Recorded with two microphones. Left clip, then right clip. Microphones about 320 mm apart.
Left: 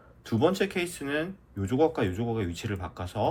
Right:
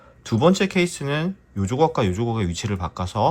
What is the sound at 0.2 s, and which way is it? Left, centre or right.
Speech, centre.